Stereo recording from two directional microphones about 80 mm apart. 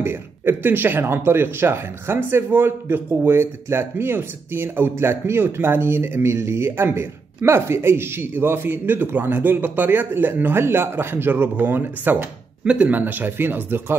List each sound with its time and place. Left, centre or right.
0.0 s speech: right